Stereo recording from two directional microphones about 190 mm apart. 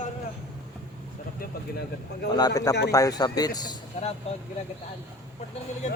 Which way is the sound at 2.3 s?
20° left (ahead or behind).